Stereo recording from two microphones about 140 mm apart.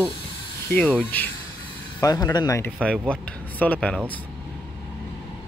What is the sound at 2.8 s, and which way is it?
Speech, 5° left (ahead or behind).